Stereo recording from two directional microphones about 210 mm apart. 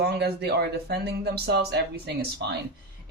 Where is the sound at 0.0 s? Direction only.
50° right (ahead or behind).